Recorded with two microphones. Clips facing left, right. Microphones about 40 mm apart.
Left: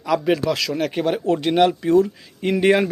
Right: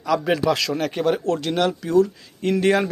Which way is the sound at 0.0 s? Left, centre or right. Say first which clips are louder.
Left 1 dB; centre.